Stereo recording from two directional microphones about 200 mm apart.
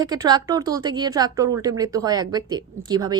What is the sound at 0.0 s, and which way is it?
A woman's voice, 20° right (ahead or behind).